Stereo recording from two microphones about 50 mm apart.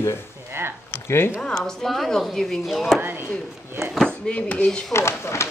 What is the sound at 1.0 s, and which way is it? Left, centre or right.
Speech, left.